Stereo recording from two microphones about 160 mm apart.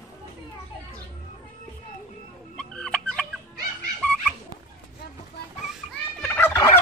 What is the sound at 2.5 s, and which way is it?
Fowl, 5° left (ahead or behind).